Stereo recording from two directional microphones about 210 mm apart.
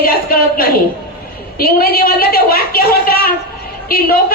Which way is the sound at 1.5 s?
45° left (ahead or behind).